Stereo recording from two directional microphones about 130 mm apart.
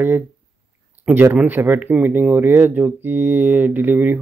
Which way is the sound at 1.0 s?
15° right (ahead or behind).